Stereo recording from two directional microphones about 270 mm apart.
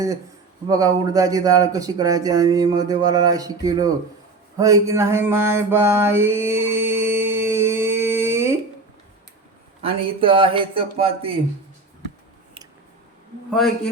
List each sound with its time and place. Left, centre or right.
0.7 s speech: centre
4.5 s mantra: centre
9.8 s speech: centre